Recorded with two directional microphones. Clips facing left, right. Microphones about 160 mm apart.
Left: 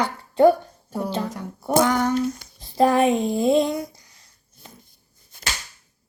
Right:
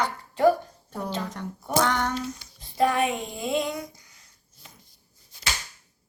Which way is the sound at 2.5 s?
35° left (ahead or behind).